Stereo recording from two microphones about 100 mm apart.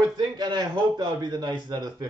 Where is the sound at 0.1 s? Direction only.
45° right (ahead or behind).